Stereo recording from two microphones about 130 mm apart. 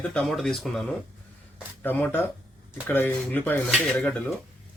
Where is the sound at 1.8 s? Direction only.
15° left (ahead or behind).